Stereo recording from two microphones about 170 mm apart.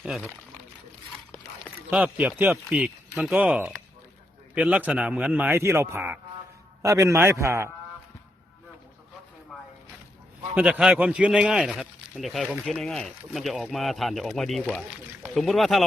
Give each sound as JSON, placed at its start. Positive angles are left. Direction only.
{"t": 0.0, "sound": "speech", "side_deg": -5}
{"t": 1.9, "sound": "speech", "side_deg": -5}
{"t": 10.5, "sound": "speech", "side_deg": -5}